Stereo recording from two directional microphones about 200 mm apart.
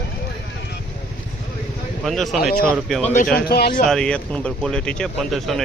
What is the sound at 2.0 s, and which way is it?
Speech, centre (ahead or behind).